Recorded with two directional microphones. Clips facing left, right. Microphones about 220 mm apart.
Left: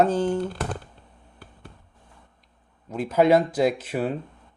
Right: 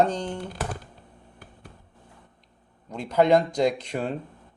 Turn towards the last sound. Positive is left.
turn(degrees=5)  # may be behind; listen again after turning